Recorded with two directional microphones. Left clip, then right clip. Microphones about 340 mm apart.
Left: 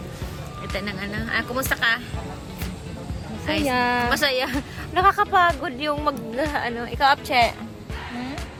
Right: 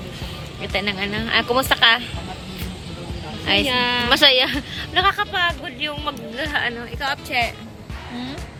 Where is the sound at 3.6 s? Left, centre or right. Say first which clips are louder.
Right 2 dB; centre.